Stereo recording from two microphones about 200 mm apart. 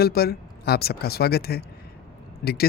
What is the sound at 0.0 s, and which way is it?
Speech, 50° left (ahead or behind).